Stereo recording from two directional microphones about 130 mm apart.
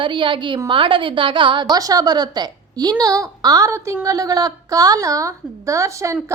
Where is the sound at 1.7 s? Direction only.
30° right (ahead or behind).